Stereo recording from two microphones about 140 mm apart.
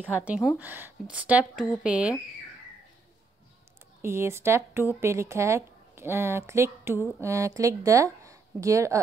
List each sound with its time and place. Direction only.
0.1 s speech: 10° right (ahead or behind)
4.0 s speech: 20° right (ahead or behind)